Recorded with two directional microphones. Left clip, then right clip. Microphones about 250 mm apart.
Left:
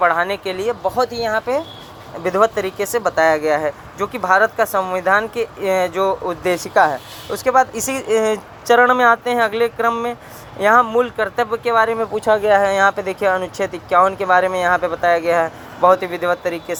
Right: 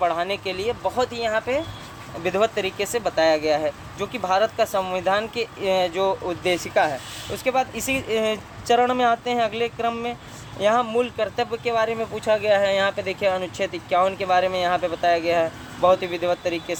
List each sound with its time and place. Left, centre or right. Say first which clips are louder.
0.0 s speech: left 6 dB; centre
2.9 s speech: left 9 dB; centre
4.0 s speech: left 6 dB; centre